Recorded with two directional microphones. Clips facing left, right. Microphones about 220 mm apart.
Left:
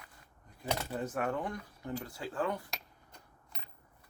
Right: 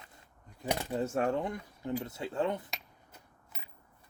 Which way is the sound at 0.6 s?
15° right (ahead or behind).